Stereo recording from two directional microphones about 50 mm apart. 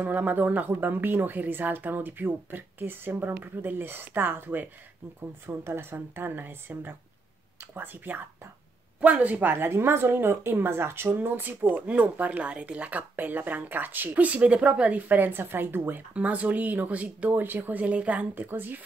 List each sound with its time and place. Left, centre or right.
0.0 s speech: right
9.0 s speech: right
11.9 s speech: right
13.1 s speech: right
15.0 s speech: right
16.1 s speech: right
17.4 s speech: right
18.3 s speech: right